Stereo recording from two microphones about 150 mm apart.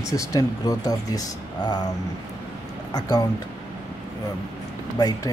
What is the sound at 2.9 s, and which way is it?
Speech, 25° left (ahead or behind).